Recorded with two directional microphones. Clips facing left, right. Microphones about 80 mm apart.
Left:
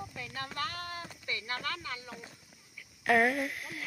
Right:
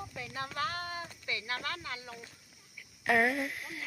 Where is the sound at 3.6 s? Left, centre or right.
Centre.